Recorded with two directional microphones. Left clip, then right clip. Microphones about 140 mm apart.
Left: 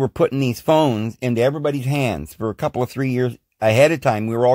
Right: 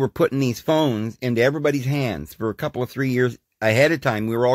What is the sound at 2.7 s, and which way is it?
Speech, 35° left (ahead or behind).